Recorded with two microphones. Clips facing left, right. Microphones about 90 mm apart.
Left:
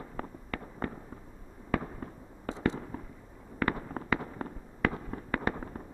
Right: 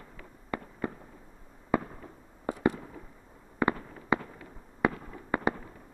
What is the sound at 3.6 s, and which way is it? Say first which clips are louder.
Fireworks: right 3 dB; 20° right (ahead or behind).